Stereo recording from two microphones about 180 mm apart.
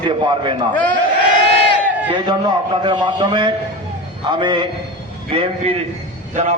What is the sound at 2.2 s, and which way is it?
A man's voice, 25° right (ahead or behind).